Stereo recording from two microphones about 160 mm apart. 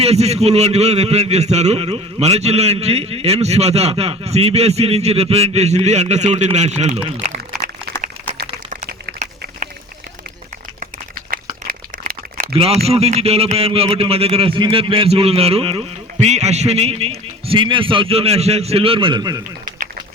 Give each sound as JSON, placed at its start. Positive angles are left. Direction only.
{"t": 0.0, "sound": "a man's voice", "side_deg": -40}
{"t": 11.3, "sound": "crumpling", "side_deg": -65}
{"t": 12.5, "sound": "a man's voice", "side_deg": -40}
{"t": 19.6, "sound": "a sound", "side_deg": -55}